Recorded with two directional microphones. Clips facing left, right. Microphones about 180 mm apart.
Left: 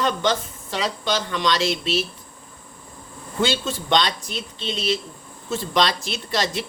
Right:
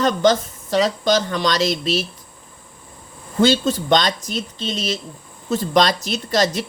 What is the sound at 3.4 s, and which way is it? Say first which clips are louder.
Speech: right 7 dB; 40° right (ahead or behind).